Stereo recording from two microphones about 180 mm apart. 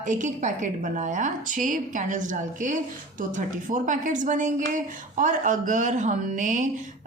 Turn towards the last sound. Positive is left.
turn(degrees=-45)  # may be behind; listen again after turning